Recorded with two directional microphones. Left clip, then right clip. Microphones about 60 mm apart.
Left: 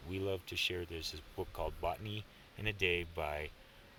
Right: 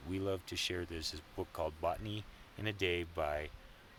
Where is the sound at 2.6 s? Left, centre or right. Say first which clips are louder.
Left 1 dB; right.